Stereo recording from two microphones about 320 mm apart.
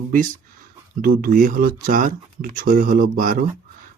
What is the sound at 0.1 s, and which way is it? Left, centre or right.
Speech, right.